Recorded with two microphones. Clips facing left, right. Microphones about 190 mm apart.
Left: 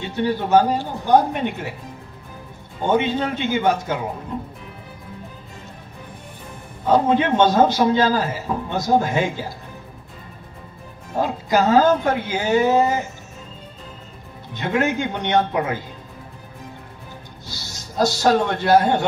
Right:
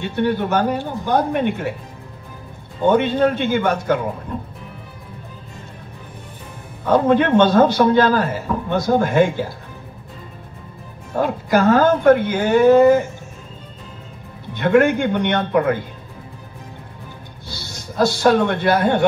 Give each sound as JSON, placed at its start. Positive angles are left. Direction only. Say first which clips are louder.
{"t": 0.1, "sound": "speech", "louder": "left 2 dB", "side_deg": -60}
{"t": 2.9, "sound": "speech", "louder": "right 4 dB", "side_deg": -60}
{"t": 6.9, "sound": "speech", "louder": "right 2 dB", "side_deg": -60}
{"t": 11.1, "sound": "speech", "louder": "right 2 dB", "side_deg": -55}
{"t": 14.6, "sound": "speech", "louder": "right 6 dB", "side_deg": -55}
{"t": 17.7, "sound": "speech", "louder": "right 2 dB", "side_deg": -55}